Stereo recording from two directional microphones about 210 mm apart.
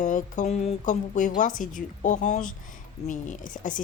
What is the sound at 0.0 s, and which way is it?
A woman's voice, 40° left (ahead or behind).